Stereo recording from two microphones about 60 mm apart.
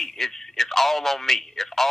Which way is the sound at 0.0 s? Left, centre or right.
Centre.